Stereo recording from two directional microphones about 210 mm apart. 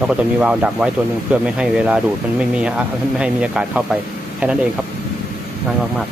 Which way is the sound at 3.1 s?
5° right (ahead or behind).